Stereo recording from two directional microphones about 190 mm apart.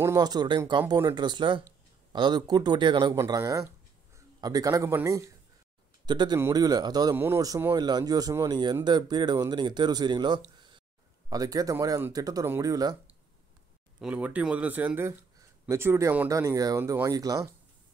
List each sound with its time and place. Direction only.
0.0 s speech: 20° right (ahead or behind)
14.0 s speech: 5° right (ahead or behind)